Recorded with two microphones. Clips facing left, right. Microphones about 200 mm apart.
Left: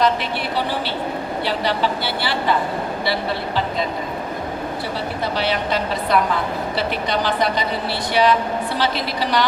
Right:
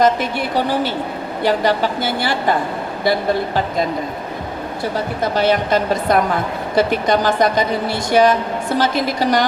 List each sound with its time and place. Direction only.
0.0 s a woman's voice: 45° right (ahead or behind)
4.9 s a woman's voice: 45° right (ahead or behind)